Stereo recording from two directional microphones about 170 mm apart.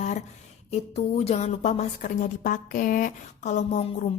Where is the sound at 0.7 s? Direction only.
40° left (ahead or behind).